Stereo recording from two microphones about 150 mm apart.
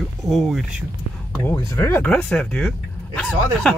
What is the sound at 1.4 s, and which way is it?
Speech, 20° left (ahead or behind).